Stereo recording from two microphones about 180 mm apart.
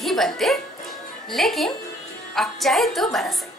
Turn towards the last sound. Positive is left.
turn(degrees=0)  # may be behind; listen again after turning